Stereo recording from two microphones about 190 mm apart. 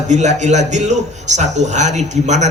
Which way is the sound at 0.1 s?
40° right (ahead or behind).